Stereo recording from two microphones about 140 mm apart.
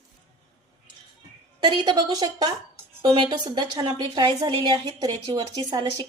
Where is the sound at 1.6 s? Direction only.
30° right (ahead or behind).